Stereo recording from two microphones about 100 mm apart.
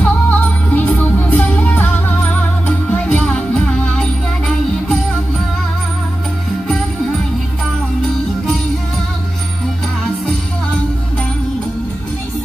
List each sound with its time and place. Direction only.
0.0 s music: 20° left (ahead or behind)